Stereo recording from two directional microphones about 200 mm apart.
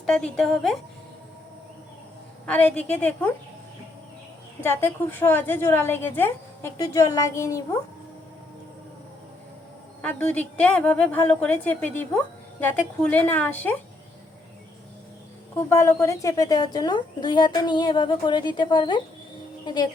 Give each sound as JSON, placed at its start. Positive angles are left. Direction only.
{"t": 0.0, "sound": "a woman's voice", "side_deg": 5}
{"t": 2.5, "sound": "a woman's voice", "side_deg": 5}
{"t": 4.6, "sound": "a woman's voice", "side_deg": 10}
{"t": 10.0, "sound": "a woman's voice", "side_deg": 5}
{"t": 15.7, "sound": "a woman's voice", "side_deg": 15}